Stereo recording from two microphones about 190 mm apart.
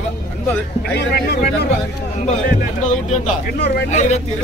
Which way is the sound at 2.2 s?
40° left (ahead or behind).